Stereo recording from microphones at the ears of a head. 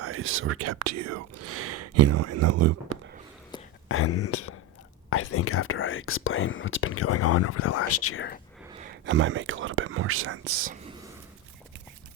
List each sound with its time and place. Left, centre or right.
0.0 s speech: right
3.8 s speech: left
8.7 s speech: right